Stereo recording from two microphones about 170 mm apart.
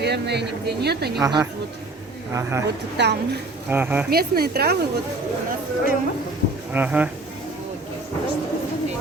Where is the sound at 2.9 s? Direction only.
80° right.